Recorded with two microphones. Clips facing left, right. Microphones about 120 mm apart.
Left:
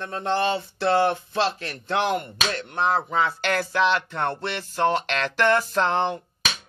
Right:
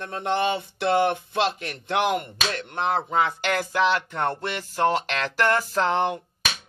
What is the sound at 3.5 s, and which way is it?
Speech, 15° right (ahead or behind).